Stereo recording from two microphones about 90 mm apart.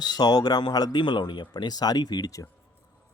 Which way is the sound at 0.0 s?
50° left (ahead or behind).